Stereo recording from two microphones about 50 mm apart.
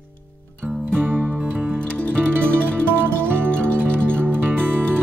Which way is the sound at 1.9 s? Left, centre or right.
Left.